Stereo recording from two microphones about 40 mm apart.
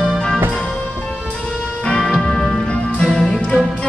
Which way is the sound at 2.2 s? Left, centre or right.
Centre.